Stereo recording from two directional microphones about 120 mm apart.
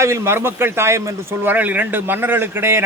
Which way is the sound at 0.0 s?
20° right (ahead or behind).